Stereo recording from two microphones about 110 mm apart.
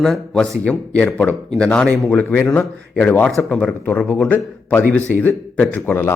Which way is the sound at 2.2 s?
15° left (ahead or behind).